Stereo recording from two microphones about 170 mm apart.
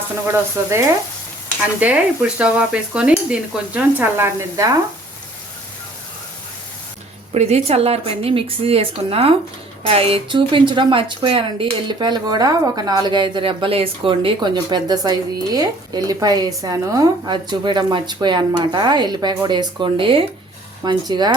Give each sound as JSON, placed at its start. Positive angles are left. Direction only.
{"t": 0.3, "sound": "stir", "side_deg": -15}
{"t": 7.3, "sound": "a woman's voice", "side_deg": -40}